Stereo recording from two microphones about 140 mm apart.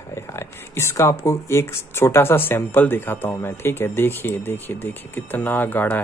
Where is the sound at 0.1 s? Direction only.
20° left (ahead or behind).